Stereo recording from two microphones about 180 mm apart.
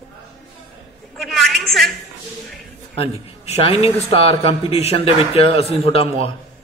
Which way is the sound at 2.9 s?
30° left (ahead or behind).